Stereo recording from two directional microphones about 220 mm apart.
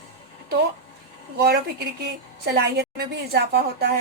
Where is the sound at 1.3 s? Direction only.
45° right (ahead or behind).